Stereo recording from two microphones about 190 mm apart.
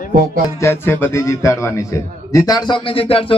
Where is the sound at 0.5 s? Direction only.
15° left (ahead or behind); by 3.4 s 30° left (ahead or behind).